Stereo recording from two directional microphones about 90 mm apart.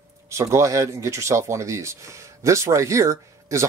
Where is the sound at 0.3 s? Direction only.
35° right (ahead or behind).